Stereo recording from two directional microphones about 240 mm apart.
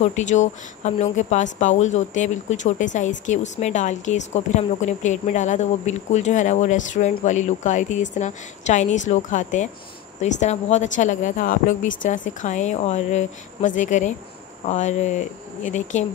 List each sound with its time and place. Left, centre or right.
0.0 s speech: left